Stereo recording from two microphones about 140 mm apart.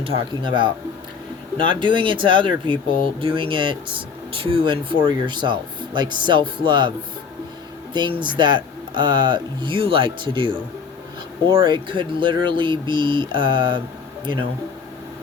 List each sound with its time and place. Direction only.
0.0 s speech: 40° right (ahead or behind)
7.9 s speech: 35° right (ahead or behind)